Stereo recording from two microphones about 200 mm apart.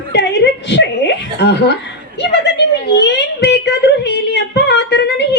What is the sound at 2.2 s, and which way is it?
A woman's voice, 55° left (ahead or behind).